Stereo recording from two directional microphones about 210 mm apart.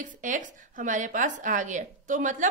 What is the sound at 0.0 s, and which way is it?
A woman's voice, 40° right (ahead or behind).